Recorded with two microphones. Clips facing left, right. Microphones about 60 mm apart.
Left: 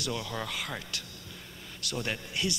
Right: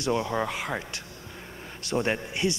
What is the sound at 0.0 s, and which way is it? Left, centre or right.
A man's voice, right.